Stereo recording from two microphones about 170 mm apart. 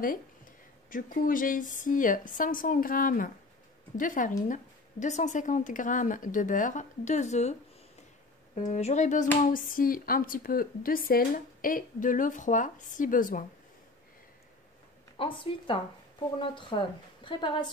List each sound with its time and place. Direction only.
0.8 s speech: 55° left (ahead or behind)
8.5 s speech: 45° left (ahead or behind)
15.1 s a woman's voice: 30° left (ahead or behind)